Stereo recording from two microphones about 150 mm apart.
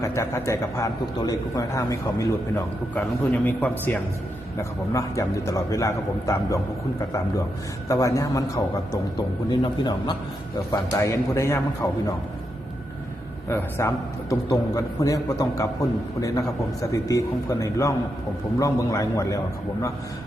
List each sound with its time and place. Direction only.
0.0 s a man's voice: 20° left (ahead or behind)
2.9 s a man's voice: 10° left (ahead or behind)
7.9 s a man's voice: 20° left (ahead or behind)
13.5 s a man's voice: 15° left (ahead or behind)